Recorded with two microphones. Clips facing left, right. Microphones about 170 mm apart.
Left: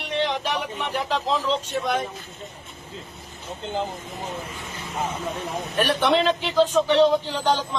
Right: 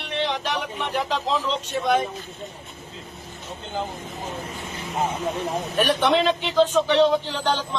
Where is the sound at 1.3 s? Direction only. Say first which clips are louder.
Left 1 dB; centre (ahead or behind).